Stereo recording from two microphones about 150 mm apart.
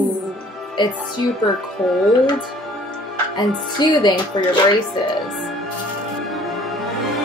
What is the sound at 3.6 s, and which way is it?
Speech, 30° left (ahead or behind).